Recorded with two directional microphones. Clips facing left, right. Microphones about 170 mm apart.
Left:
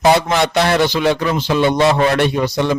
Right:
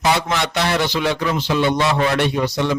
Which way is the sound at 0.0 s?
40° left (ahead or behind).